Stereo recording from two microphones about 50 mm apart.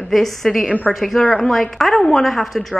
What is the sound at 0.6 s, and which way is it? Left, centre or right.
Speech, left.